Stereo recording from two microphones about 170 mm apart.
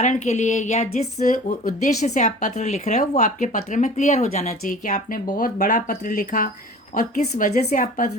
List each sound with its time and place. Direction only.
0.0 s speech: 45° left (ahead or behind)